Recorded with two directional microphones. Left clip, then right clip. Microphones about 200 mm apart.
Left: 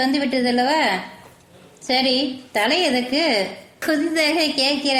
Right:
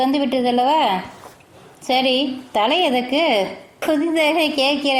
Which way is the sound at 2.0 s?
15° right (ahead or behind).